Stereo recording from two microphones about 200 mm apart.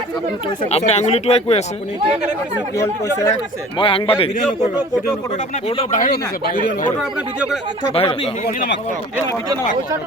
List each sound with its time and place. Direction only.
0.6 s speech: 30° left (ahead or behind)
2.7 s speech: 15° left (ahead or behind)
3.8 s a man's voice: 25° left (ahead or behind)
5.9 s speech: 45° left (ahead or behind)
7.9 s a man's voice: 30° left (ahead or behind)
8.4 s speech: 50° left (ahead or behind)